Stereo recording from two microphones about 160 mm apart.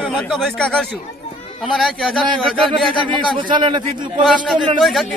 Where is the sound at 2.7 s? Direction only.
30° right (ahead or behind).